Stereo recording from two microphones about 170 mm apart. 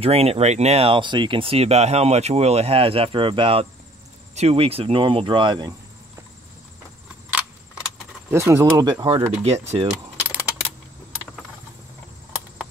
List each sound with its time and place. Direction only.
0.0 s speech: 35° right (ahead or behind)
8.3 s speech: 15° right (ahead or behind)
9.0 s speech: 35° right (ahead or behind)
10.2 s a sound: 10° right (ahead or behind)